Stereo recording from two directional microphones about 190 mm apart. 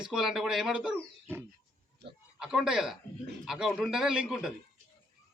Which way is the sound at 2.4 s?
5° right (ahead or behind).